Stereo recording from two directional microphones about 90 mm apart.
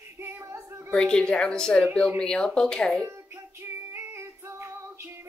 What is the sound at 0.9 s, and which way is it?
A woman's voice, 5° left (ahead or behind).